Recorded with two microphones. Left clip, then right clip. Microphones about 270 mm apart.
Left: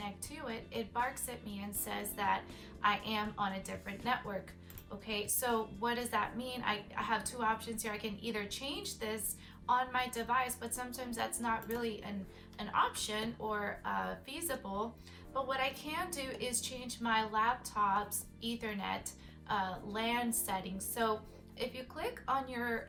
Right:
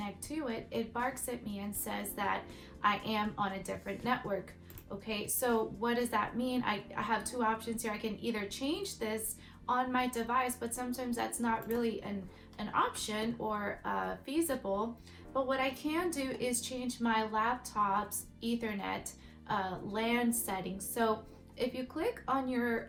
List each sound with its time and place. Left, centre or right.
0.0 s a woman's voice: centre